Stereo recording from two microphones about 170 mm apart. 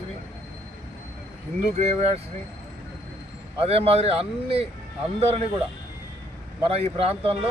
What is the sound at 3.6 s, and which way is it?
Speech, 35° right (ahead or behind).